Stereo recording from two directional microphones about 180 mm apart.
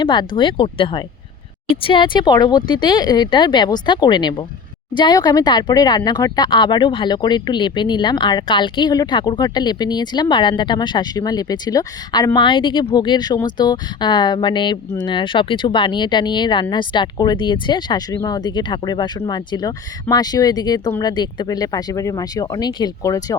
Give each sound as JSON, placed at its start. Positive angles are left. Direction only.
{"t": 0.0, "sound": "speech", "side_deg": 25}